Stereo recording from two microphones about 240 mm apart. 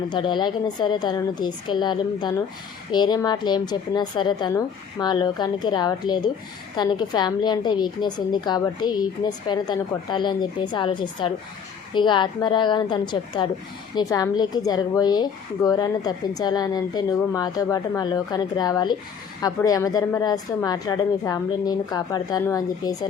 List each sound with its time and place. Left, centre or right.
0.1 s a woman's voice: centre